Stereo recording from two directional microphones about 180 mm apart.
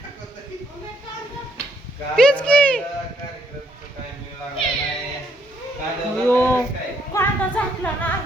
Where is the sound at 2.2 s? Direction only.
5° left (ahead or behind).